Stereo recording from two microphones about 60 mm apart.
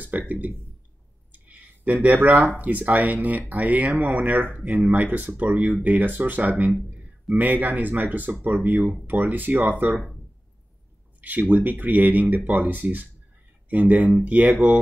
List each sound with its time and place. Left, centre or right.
0.3 s speech: right
1.3 s a sound: right
2.6 s speech: right
11.1 s speech: right